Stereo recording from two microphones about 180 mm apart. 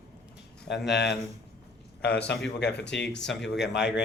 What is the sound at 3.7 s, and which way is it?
Speech, 5° right (ahead or behind).